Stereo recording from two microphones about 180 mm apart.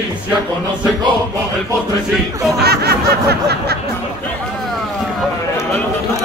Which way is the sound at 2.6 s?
65° right (ahead or behind).